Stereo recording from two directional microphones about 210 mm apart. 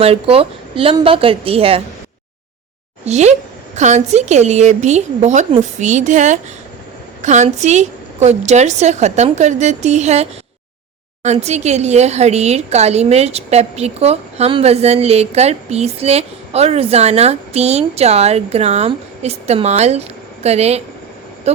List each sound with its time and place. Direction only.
0.0 s a woman's voice: 25° right (ahead or behind)
3.0 s speech: 30° right (ahead or behind)